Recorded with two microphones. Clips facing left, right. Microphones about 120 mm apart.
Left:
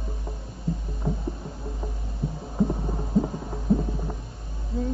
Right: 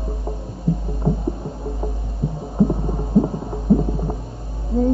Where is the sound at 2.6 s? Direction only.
25° right (ahead or behind).